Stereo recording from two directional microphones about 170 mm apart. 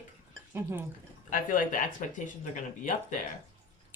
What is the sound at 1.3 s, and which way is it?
Speech, 55° left (ahead or behind).